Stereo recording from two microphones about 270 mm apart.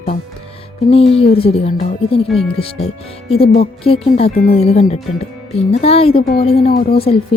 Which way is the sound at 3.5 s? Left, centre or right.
Left.